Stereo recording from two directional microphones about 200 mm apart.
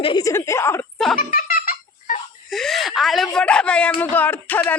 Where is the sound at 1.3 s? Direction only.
45° left (ahead or behind).